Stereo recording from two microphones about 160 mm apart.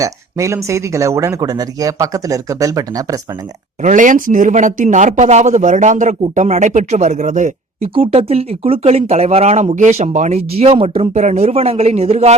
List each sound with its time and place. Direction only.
0.0 s speech: 20° right (ahead or behind)
3.8 s a man's voice: 55° right (ahead or behind)
7.9 s speech: 35° right (ahead or behind)